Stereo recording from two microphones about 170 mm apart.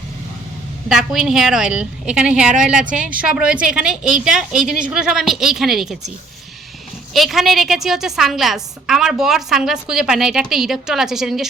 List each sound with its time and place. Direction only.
0.9 s a woman's voice: 5° right (ahead or behind)
2.8 s speech: 50° right (ahead or behind)
3.1 s a woman's voice: 5° right (ahead or behind)
7.1 s a woman's voice: centre (ahead or behind)